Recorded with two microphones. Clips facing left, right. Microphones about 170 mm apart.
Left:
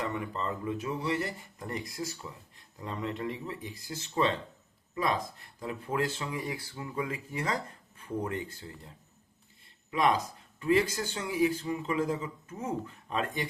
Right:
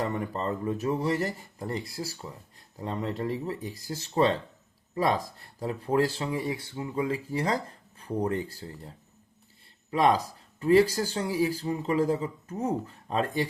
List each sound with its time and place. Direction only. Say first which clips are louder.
0.0 s speech: right 4 dB; 40° right (ahead or behind)
9.9 s speech: right 4 dB; 35° right (ahead or behind)